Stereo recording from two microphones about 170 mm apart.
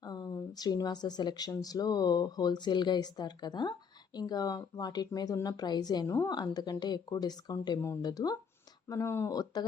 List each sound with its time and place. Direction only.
0.0 s speech: 25° left (ahead or behind)